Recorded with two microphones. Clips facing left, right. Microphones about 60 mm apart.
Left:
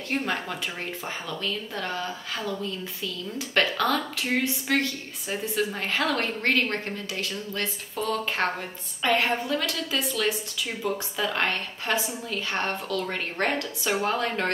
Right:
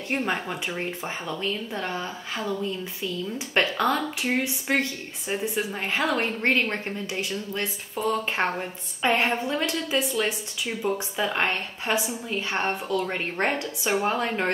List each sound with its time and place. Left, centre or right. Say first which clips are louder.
0.1 s a woman's voice: right 1 dB; centre